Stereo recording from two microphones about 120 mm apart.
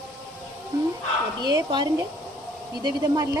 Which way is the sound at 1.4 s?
35° right (ahead or behind).